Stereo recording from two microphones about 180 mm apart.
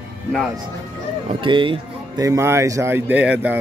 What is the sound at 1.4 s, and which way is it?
Speech, 25° right (ahead or behind).